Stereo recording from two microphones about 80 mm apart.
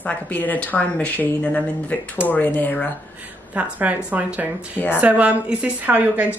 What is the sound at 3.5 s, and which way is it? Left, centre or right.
A woman's voice, centre.